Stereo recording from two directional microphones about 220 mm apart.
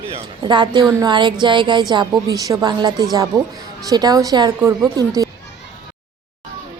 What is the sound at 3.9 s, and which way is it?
A man's voice, 15° right (ahead or behind).